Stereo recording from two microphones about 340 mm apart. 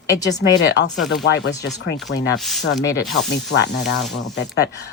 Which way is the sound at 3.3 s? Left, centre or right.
Left.